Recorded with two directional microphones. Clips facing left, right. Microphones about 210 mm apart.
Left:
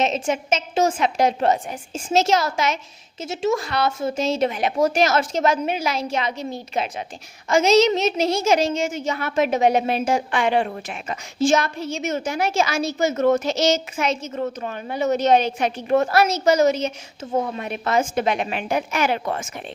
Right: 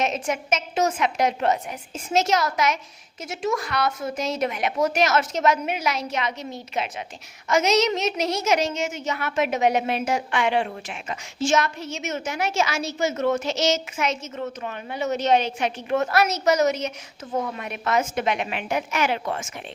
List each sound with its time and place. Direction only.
0.0 s a woman's voice: 25° left (ahead or behind)